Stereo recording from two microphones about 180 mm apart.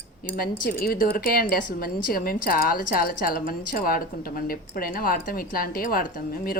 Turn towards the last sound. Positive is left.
turn(degrees=55)  # may be behind; listen again after turning